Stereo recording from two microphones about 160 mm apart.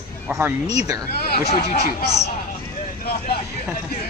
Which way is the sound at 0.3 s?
15° right (ahead or behind).